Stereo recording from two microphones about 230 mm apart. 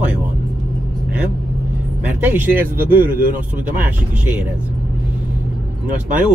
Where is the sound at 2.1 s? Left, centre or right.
Centre.